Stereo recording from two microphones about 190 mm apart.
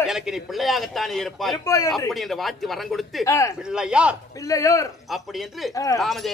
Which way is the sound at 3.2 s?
15° left (ahead or behind).